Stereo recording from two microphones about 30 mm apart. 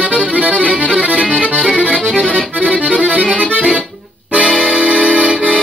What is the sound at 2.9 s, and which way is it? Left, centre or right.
Accordion, right.